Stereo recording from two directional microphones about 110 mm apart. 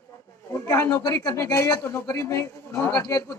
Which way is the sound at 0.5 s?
25° left (ahead or behind).